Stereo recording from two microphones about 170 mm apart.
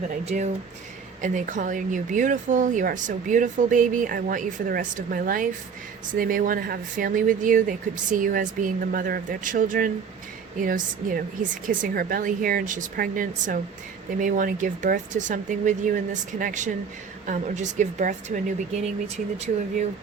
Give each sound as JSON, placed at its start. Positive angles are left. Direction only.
{"t": 0.3, "sound": "speech", "side_deg": -40}